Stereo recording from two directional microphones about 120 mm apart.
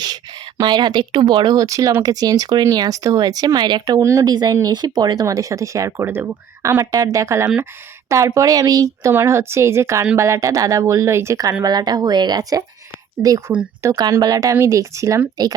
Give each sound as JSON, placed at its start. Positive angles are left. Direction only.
{"t": 0.0, "sound": "speech", "side_deg": -35}
{"t": 13.9, "sound": "speech", "side_deg": -35}